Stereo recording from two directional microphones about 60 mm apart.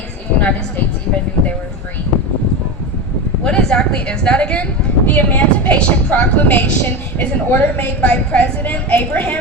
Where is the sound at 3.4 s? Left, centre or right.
Centre.